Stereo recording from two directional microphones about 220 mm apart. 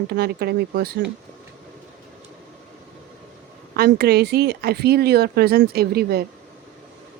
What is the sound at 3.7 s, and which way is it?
Speech, 45° right (ahead or behind).